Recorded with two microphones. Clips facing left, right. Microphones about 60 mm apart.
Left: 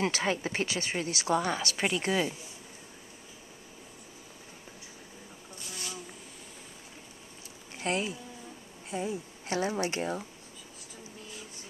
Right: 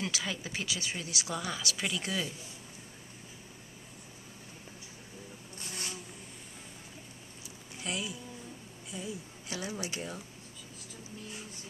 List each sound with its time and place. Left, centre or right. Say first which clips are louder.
0.0 s speech: left 7 dB; left
5.6 s bee: even; right
7.7 s speech: left 6 dB; left